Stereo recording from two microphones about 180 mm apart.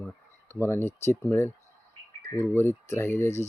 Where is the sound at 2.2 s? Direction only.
20° left (ahead or behind).